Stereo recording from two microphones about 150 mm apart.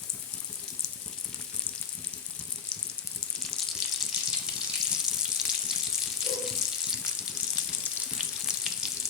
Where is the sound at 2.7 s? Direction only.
5° left (ahead or behind).